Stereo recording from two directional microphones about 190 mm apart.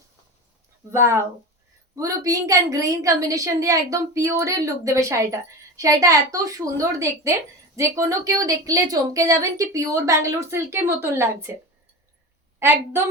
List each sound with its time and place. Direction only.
1.0 s a woman's voice: 15° right (ahead or behind)
12.5 s a woman's voice: 10° right (ahead or behind)